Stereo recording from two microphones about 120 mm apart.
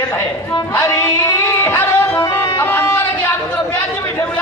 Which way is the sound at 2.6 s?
20° left (ahead or behind).